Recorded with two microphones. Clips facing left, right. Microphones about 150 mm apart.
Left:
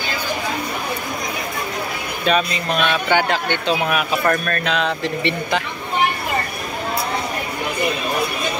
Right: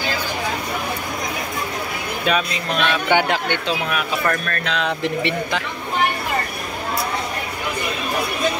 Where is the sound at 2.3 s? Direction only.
Centre (ahead or behind).